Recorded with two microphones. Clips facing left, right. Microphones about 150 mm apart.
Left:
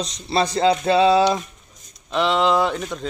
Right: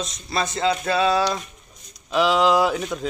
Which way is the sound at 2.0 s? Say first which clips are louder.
Right 1 dB; centre (ahead or behind).